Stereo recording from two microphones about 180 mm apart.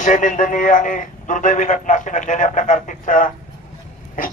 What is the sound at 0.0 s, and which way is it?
A man's voice, 45° left (ahead or behind).